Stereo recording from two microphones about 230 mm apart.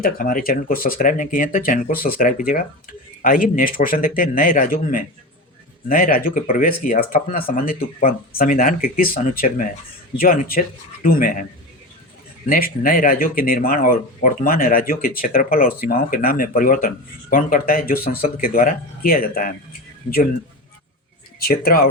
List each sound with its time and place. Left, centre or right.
0.0 s speech: left
12.5 s speech: left
21.3 s speech: left